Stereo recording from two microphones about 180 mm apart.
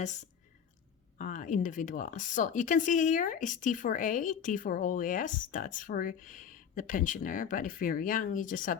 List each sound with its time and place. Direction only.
1.2 s speech: 45° left (ahead or behind)